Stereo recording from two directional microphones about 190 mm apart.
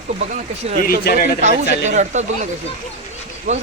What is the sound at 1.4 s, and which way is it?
Speech, 40° right (ahead or behind).